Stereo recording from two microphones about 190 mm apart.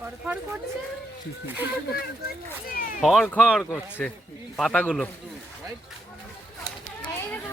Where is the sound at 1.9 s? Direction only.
55° left (ahead or behind).